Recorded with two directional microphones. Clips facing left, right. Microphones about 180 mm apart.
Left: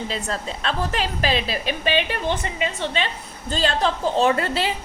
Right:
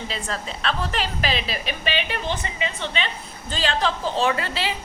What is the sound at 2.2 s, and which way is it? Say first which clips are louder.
A woman's voice: left 3 dB; 55° left (ahead or behind).